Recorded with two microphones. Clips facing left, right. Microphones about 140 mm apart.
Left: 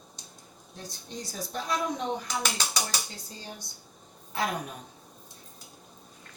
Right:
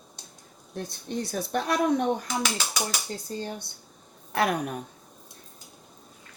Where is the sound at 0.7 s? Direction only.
60° right (ahead or behind).